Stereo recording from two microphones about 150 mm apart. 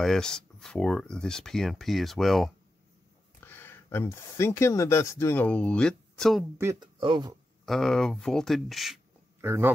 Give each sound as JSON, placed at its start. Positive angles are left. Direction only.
{"t": 0.0, "sound": "speech", "side_deg": 5}
{"t": 3.4, "sound": "speech", "side_deg": 15}
{"t": 6.6, "sound": "speech", "side_deg": -20}
{"t": 7.0, "sound": "speech", "side_deg": -30}
{"t": 7.6, "sound": "speech", "side_deg": 5}
{"t": 9.4, "sound": "speech", "side_deg": -15}